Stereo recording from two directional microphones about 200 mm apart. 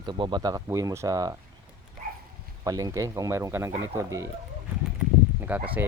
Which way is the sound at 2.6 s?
15° right (ahead or behind).